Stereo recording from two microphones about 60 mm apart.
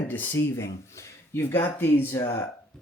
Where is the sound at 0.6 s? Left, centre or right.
Left.